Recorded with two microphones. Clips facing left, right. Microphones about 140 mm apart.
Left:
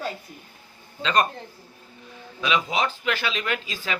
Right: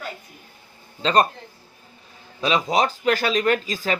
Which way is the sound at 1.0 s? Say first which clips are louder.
Right 4 dB; 35° right (ahead or behind).